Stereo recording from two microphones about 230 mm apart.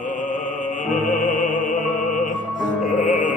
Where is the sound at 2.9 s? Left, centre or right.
Left.